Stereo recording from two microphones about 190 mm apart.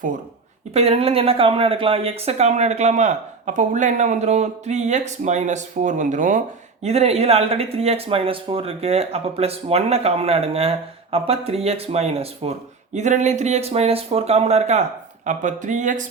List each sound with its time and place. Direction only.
0.7 s speech: 35° right (ahead or behind)